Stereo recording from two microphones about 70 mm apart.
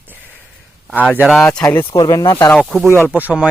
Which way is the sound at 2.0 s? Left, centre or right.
Left.